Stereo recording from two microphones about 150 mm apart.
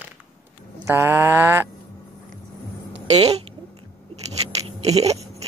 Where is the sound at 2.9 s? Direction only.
45° right (ahead or behind).